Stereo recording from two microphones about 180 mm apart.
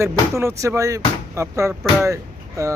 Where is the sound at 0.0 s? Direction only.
15° right (ahead or behind).